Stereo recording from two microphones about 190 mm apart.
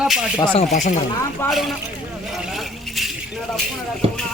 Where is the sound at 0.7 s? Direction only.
40° left (ahead or behind).